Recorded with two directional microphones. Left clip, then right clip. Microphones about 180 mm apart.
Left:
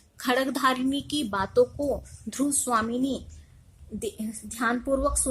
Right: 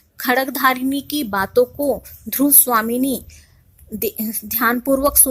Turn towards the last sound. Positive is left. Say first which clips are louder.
# right 9 dB
turn(degrees=-40)  # may be behind; listen again after turning